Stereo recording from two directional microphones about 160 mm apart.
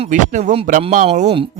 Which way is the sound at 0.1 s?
50° right (ahead or behind).